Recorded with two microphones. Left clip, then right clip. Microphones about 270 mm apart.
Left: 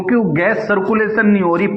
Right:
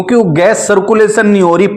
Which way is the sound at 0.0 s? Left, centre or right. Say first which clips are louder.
Right 7 dB; right.